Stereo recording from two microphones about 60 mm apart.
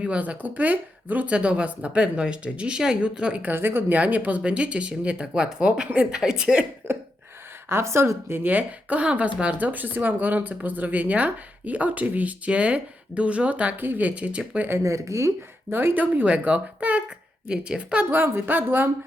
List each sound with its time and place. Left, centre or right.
0.0 s speech: right
3.4 s speech: right; by 6.7 s centre
7.7 s a woman's voice: right
8.4 s speech: right
14.8 s speech: right
15.7 s speech: right
16.2 s a woman's voice: right
18.1 s speech: right